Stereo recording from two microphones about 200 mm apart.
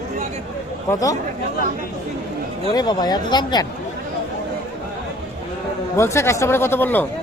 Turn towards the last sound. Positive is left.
turn(degrees=10)  # may be behind; listen again after turning